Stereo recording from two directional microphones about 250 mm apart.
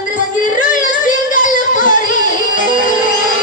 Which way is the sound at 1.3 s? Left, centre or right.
Left.